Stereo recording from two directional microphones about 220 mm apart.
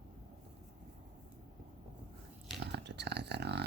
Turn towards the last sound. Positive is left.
turn(degrees=-50)  # may be behind; listen again after turning